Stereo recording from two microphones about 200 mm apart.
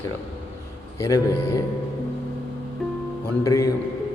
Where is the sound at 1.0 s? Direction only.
15° left (ahead or behind).